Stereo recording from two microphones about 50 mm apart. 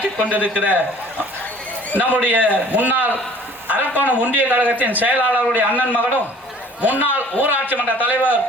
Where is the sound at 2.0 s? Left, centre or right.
Right.